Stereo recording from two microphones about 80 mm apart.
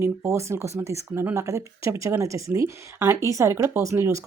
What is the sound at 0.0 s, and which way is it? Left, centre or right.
A woman's voice, right.